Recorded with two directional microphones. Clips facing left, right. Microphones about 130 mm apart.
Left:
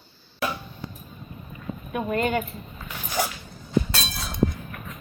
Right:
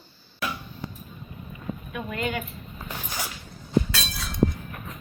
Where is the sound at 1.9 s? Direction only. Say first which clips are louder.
Left 6 dB; 40° left (ahead or behind).